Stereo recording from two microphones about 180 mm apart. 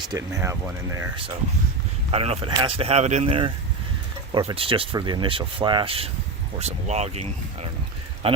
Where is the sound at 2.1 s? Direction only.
35° right (ahead or behind).